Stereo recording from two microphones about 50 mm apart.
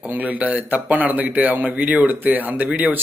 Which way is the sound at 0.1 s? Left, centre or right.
Right.